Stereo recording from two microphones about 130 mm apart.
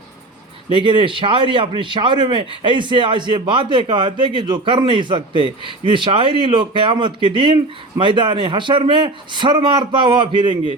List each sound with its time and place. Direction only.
0.7 s a man's voice: 40° right (ahead or behind)